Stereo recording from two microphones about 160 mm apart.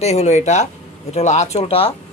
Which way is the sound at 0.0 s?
45° left (ahead or behind).